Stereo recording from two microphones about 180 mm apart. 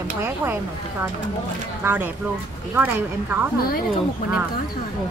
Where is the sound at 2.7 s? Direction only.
10° right (ahead or behind).